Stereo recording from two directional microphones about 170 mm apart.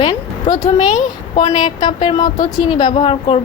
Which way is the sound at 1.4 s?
45° left (ahead or behind).